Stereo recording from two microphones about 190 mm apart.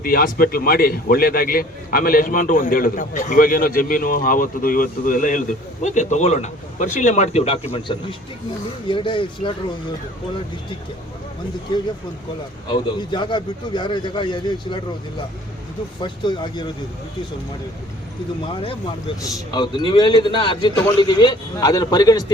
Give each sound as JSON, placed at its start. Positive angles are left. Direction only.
{"t": 0.0, "sound": "a man's voice", "side_deg": 50}
{"t": 12.7, "sound": "a man's voice", "side_deg": 25}
{"t": 16.0, "sound": "a man's voice", "side_deg": 25}
{"t": 18.5, "sound": "a man's voice", "side_deg": 30}